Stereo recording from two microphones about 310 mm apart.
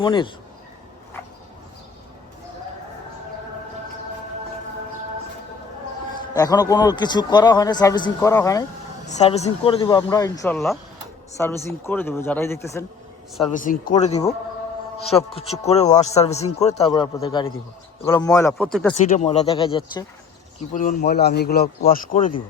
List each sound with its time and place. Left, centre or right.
0.0 s a man's voice: centre
6.3 s a man's voice: centre
13.5 s a man's voice: left; by 18.9 s centre
18.9 s a man's voice: left
21.0 s a man's voice: left